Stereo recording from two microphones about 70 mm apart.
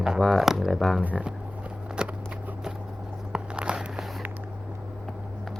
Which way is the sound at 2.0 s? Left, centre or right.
Centre.